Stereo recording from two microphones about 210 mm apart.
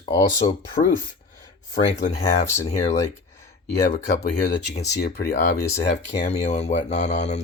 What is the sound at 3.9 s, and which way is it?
Speech, 45° left (ahead or behind).